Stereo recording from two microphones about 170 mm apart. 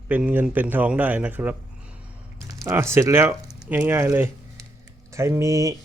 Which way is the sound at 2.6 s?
15° right (ahead or behind).